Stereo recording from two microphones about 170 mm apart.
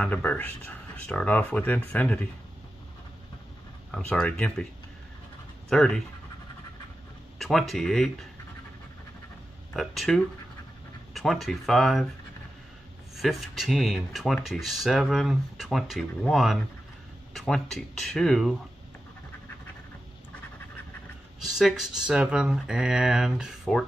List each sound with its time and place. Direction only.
0.0 s speech: 10° left (ahead or behind)
3.9 s speech: 5° left (ahead or behind)
5.7 s speech: 5° left (ahead or behind)
7.3 s speech: centre (ahead or behind)
9.8 s speech: centre (ahead or behind)
13.1 s speech: centre (ahead or behind)
21.5 s speech: centre (ahead or behind)